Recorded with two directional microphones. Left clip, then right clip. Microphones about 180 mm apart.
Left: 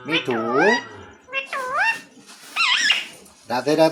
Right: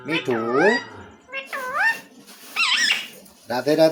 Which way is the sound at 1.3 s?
30° left (ahead or behind).